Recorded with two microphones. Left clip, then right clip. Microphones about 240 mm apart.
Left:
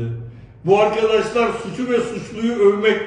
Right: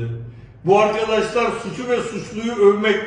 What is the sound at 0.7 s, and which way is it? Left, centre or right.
Speech, centre.